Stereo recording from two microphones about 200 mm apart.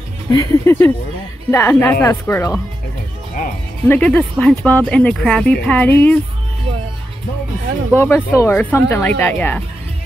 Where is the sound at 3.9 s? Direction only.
5° left (ahead or behind).